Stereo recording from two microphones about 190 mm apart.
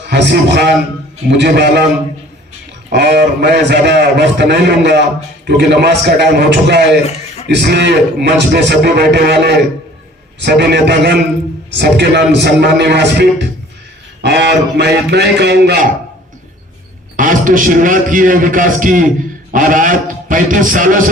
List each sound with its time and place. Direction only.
0.0 s a man's voice: 65° right (ahead or behind)
2.9 s a man's voice: 65° right (ahead or behind)
7.0 s a sound: 35° left (ahead or behind)
7.4 s a man's voice: 60° right (ahead or behind)
17.2 s a man's voice: 45° right (ahead or behind)